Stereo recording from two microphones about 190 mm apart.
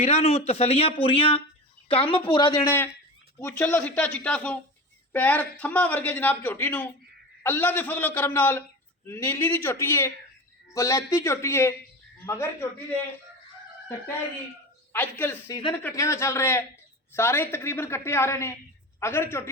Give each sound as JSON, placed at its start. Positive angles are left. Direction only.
{"t": 0.0, "sound": "speech", "side_deg": 35}
{"t": 3.3, "sound": "speech", "side_deg": 10}
{"t": 14.9, "sound": "speech", "side_deg": 10}